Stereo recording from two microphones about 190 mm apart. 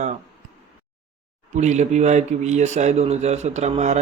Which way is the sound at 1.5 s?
35° right (ahead or behind).